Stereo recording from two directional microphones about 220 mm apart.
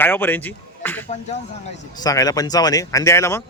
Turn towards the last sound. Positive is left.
turn(degrees=10)  # may be behind; listen again after turning